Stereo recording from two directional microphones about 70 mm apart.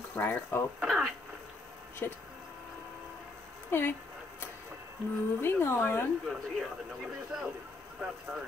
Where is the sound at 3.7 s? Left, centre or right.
Left.